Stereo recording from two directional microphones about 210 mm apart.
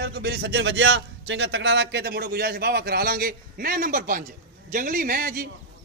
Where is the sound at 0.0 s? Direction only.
50° right (ahead or behind).